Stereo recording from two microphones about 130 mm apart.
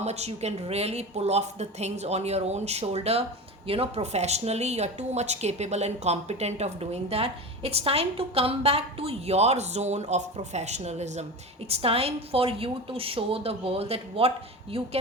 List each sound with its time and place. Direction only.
0.0 s a woman's voice: 55° right (ahead or behind)
11.7 s a woman's voice: 50° right (ahead or behind)